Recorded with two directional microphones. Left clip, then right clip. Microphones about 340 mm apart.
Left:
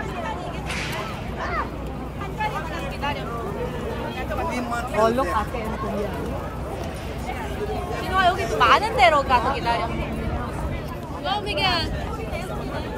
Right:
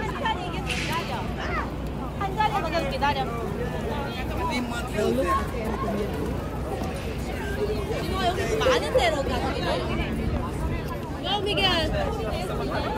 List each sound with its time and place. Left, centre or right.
4.5 s a sound: centre
8.2 s speech: left
11.2 s speech: centre